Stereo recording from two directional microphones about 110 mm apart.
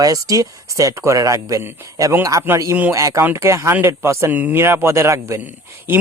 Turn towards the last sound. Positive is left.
turn(degrees=-15)  # may be behind; listen again after turning